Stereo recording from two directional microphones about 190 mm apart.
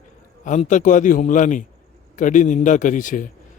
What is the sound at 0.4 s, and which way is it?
A man's voice, 40° left (ahead or behind).